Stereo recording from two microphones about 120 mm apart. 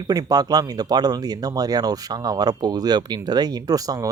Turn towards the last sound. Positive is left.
turn(degrees=-35)  # may be behind; listen again after turning